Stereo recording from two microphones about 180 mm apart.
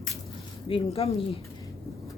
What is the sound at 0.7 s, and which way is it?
Speech, 35° left (ahead or behind).